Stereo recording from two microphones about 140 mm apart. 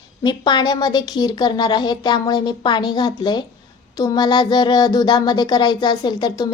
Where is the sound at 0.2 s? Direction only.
30° left (ahead or behind).